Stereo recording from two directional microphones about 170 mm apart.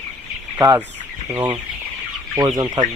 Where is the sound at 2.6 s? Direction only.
25° right (ahead or behind).